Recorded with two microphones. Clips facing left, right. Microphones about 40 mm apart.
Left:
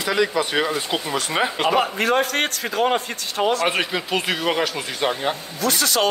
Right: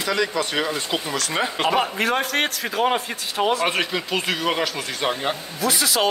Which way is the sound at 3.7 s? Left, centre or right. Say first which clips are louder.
Left 1 dB; centre.